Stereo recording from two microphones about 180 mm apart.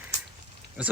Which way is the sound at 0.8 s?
5° right (ahead or behind).